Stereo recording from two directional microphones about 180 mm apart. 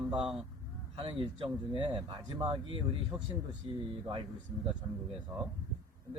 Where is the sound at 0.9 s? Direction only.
30° right (ahead or behind).